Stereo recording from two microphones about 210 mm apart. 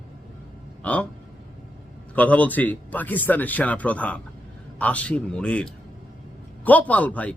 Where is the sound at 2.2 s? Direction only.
5° left (ahead or behind).